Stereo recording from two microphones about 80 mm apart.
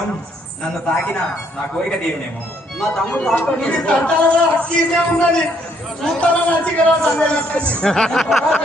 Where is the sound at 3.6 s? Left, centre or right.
Centre.